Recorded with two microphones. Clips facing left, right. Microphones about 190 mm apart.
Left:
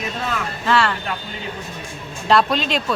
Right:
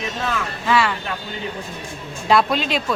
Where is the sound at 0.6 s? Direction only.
10° right (ahead or behind).